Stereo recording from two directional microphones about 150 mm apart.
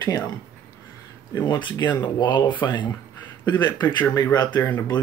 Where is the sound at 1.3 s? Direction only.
25° left (ahead or behind).